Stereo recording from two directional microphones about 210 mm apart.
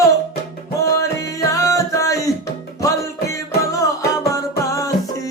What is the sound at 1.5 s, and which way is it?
Music, 15° left (ahead or behind).